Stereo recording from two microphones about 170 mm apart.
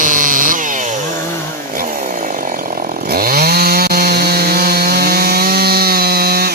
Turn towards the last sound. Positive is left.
turn(degrees=-65)  # may be behind; listen again after turning